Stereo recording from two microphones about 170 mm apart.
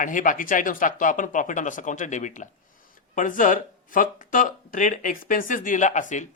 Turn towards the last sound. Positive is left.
turn(degrees=45)  # may be behind; listen again after turning